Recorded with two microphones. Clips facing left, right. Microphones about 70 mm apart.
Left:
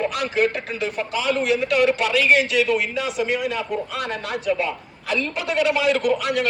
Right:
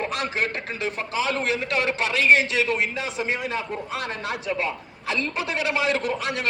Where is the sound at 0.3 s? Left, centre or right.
Right.